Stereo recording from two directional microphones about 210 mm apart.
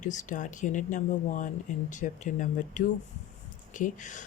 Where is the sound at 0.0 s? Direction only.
35° left (ahead or behind).